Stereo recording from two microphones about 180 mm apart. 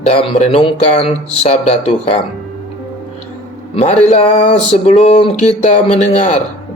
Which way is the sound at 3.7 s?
35° left (ahead or behind).